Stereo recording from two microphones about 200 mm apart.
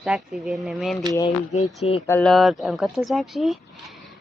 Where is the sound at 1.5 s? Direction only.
35° left (ahead or behind).